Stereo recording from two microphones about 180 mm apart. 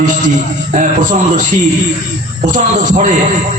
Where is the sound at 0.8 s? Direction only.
45° right (ahead or behind).